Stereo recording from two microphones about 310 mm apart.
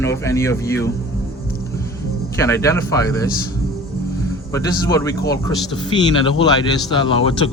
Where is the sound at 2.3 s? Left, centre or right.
Centre.